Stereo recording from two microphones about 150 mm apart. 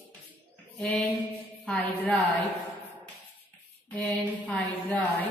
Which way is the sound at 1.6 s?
10° left (ahead or behind).